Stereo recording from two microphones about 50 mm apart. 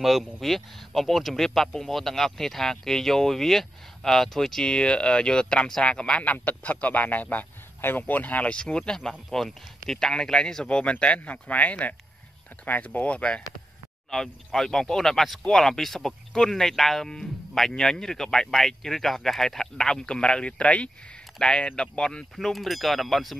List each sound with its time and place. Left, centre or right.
0.0 s speech: centre; by 6.3 s left
6.3 s a man's voice: left
8.5 s speech: centre
14.1 s speech: centre
22.3 s speech: centre